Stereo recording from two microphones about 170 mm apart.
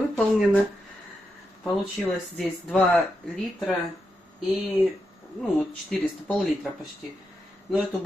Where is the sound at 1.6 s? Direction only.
5° left (ahead or behind).